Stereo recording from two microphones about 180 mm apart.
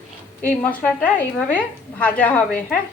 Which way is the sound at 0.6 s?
5° left (ahead or behind).